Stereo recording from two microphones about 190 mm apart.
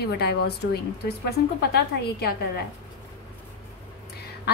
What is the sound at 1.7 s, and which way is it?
Speech, 55° left (ahead or behind).